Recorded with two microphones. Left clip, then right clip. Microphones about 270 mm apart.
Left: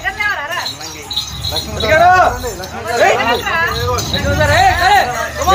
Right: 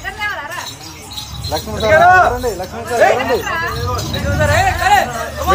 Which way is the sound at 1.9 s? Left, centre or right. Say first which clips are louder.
Even; left.